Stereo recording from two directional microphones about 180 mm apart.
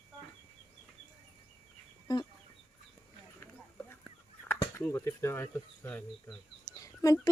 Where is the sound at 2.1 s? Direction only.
20° left (ahead or behind).